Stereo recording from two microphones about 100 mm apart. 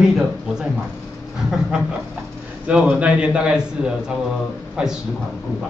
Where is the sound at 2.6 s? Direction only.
10° right (ahead or behind).